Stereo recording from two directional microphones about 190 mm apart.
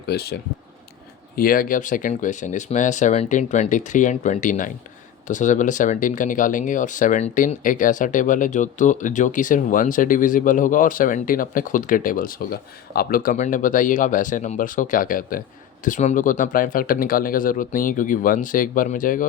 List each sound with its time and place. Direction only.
0.0 s speech: 60° left (ahead or behind)
1.4 s speech: 50° left (ahead or behind)